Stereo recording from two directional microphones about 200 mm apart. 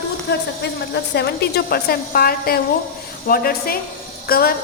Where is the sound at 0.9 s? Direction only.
55° left (ahead or behind).